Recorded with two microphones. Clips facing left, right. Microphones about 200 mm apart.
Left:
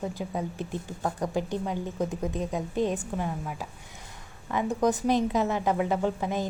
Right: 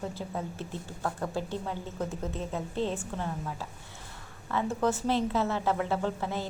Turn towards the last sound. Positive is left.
turn(degrees=15)  # may be behind; listen again after turning